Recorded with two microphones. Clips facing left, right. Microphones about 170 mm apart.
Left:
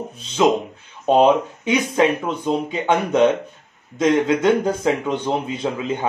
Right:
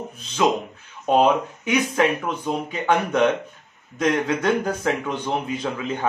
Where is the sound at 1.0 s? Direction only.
25° left (ahead or behind).